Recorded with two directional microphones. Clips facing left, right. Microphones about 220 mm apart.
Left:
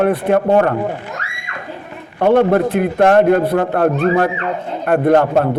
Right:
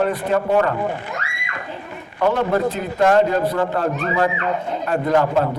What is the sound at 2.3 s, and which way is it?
A man's voice, 55° left (ahead or behind).